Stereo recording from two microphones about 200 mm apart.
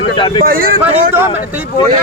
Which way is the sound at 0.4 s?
45° right (ahead or behind).